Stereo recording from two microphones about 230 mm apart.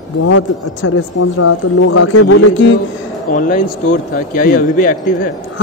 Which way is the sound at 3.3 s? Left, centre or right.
Left.